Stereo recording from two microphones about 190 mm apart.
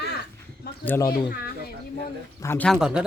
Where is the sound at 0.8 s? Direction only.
10° left (ahead or behind).